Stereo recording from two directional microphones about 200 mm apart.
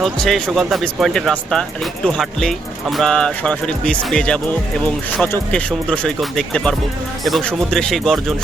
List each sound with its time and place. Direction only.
0.0 s speech: centre (ahead or behind)